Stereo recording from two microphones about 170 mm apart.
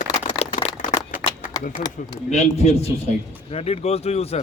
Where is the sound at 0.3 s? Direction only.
35° left (ahead or behind).